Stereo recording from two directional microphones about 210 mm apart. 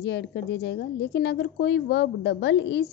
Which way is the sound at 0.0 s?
55° left (ahead or behind).